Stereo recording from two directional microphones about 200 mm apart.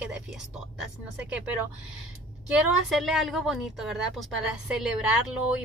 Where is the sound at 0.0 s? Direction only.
5° right (ahead or behind).